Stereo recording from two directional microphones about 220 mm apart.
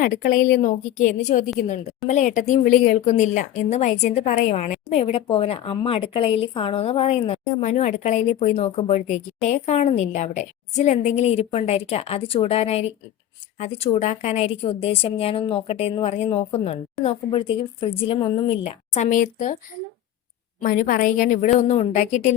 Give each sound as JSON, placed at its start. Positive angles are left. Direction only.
{"t": 0.0, "sound": "a woman's voice", "side_deg": 40}
{"t": 20.6, "sound": "a woman's voice", "side_deg": 40}